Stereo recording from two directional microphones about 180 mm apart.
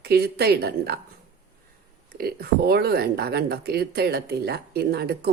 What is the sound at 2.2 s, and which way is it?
Speech, 55° right (ahead or behind).